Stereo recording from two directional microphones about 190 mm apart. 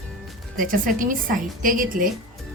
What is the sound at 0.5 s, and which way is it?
A woman's voice, 45° right (ahead or behind).